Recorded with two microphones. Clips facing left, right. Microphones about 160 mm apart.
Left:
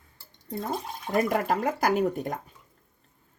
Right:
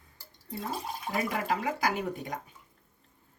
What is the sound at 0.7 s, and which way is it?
Speech, 50° left (ahead or behind).